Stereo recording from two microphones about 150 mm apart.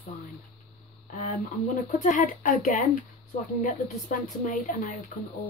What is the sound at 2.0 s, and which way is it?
Speech, 60° left (ahead or behind).